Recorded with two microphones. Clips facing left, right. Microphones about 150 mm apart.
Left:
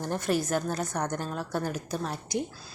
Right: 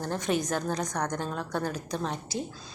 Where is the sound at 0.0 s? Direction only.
15° left (ahead or behind).